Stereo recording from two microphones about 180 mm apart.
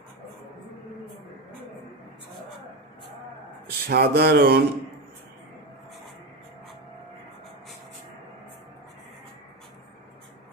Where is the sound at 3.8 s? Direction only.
65° right (ahead or behind).